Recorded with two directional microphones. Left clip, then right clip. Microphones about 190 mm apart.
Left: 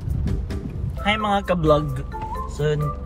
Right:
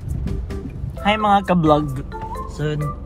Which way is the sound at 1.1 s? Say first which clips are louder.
Right 4 dB; 15° right (ahead or behind).